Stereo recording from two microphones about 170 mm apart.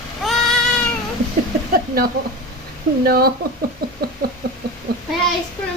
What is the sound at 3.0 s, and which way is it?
Speech, 60° right (ahead or behind).